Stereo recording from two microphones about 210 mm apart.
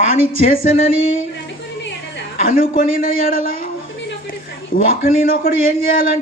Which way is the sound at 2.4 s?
40° left (ahead or behind).